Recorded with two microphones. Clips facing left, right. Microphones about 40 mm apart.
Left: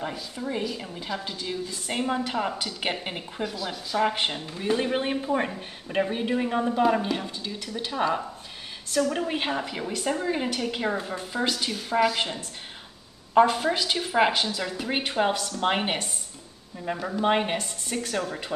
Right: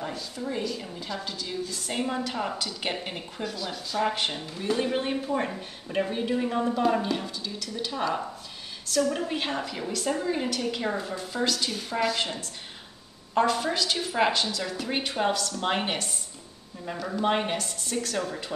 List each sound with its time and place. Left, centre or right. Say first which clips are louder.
0.0 s a woman's voice: left 1 dB; centre
9.3 s a woman's voice: left 2 dB; centre
13.3 s a woman's voice: left 4 dB; centre